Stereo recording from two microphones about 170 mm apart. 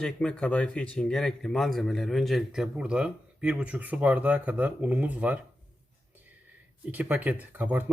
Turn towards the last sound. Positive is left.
turn(degrees=-10)  # may be behind; listen again after turning